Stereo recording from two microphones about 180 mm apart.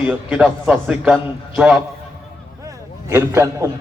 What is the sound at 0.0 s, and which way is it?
A man's voice, 5° right (ahead or behind).